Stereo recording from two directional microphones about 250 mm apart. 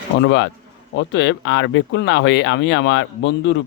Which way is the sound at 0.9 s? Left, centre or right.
Left.